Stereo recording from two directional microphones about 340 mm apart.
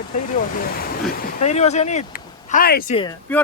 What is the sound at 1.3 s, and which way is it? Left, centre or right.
Speech, centre.